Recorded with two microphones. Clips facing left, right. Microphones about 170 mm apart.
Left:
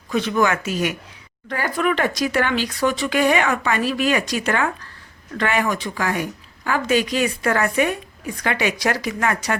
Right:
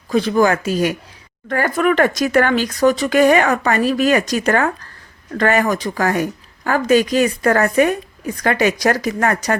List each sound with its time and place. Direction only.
0.1 s speech: 35° right (ahead or behind)
1.5 s speech: 50° right (ahead or behind)